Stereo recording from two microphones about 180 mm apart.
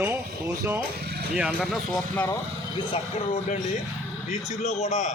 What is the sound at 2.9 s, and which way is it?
A man's voice, 30° left (ahead or behind).